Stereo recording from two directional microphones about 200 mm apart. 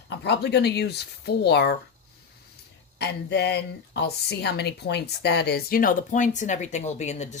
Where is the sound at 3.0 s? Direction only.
55° left (ahead or behind).